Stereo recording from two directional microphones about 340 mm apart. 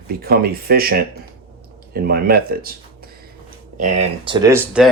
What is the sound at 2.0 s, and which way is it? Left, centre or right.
Speech, right.